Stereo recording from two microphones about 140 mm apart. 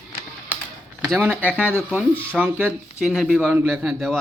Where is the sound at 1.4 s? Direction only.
10° right (ahead or behind).